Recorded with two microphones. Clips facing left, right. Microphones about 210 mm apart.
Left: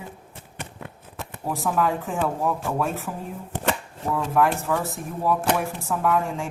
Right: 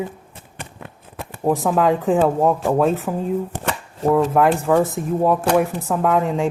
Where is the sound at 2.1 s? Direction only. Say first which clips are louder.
Right 8 dB; 55° right (ahead or behind).